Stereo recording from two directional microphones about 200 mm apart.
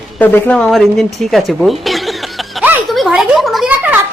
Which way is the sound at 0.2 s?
10° left (ahead or behind).